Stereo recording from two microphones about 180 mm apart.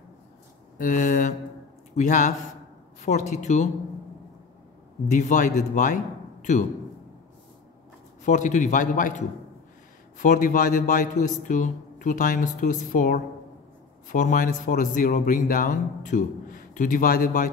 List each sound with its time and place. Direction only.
0.7 s speech: 45° left (ahead or behind)
5.0 s speech: 45° left (ahead or behind)
8.3 s speech: 45° left (ahead or behind)
10.1 s speech: 45° left (ahead or behind)